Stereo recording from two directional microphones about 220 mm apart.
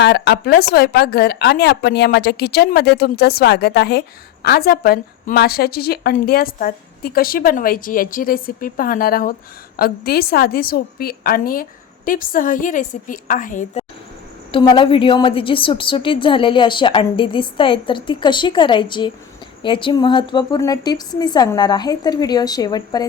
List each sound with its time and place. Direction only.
0.0 s a woman's voice: 50° left (ahead or behind)
14.5 s a woman's voice: 20° left (ahead or behind)